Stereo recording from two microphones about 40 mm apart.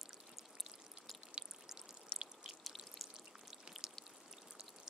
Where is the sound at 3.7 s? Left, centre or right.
Right.